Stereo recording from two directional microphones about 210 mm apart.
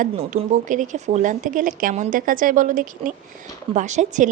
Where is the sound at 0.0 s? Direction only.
35° right (ahead or behind).